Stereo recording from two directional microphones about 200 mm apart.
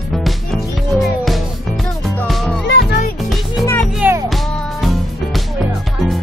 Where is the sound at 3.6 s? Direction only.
10° left (ahead or behind).